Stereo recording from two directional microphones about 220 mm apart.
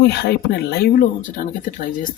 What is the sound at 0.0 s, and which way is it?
Speech, 45° left (ahead or behind).